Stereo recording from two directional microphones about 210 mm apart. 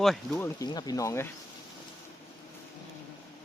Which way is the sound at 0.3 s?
15° left (ahead or behind).